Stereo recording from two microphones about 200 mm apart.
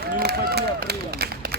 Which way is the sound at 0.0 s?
50° right (ahead or behind).